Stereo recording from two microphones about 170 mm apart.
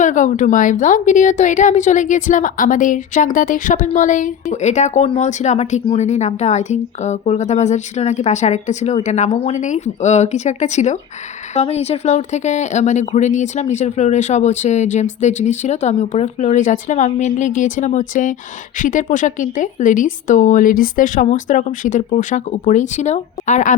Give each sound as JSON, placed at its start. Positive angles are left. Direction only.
{"t": 0.0, "sound": "speech", "side_deg": 45}